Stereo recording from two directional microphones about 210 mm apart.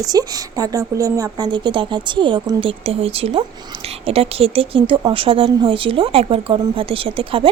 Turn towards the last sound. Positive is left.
turn(degrees=-25)  # may be behind; listen again after turning